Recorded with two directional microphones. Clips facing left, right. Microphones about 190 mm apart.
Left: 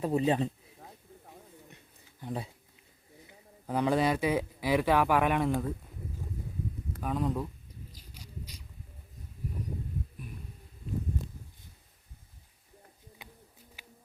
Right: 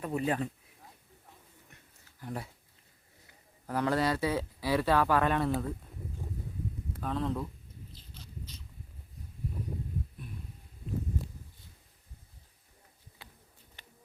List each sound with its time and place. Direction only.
0.0 s speech: 25° left (ahead or behind)
2.2 s speech: 20° left (ahead or behind)
7.0 s speech: 10° left (ahead or behind)
8.0 s a sound: 10° left (ahead or behind)
13.2 s bird: 15° left (ahead or behind)
13.8 s a sound: 5° left (ahead or behind)